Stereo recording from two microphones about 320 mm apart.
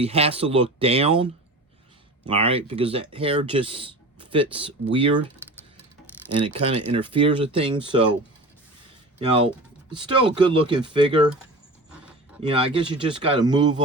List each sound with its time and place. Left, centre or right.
0.0 s speech: centre
6.4 s speech: centre
9.9 s speech: centre
11.9 s a sound: centre
12.4 s speech: centre